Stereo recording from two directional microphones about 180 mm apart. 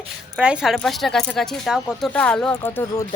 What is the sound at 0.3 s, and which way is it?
Speech, 5° right (ahead or behind).